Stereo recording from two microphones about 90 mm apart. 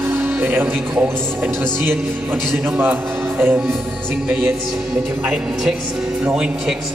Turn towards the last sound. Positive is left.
turn(degrees=-10)  # may be behind; listen again after turning